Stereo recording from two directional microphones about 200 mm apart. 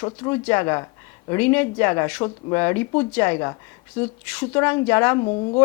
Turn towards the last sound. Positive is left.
turn(degrees=25)  # may be behind; listen again after turning